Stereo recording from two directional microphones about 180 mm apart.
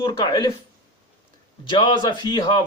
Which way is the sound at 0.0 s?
25° left (ahead or behind).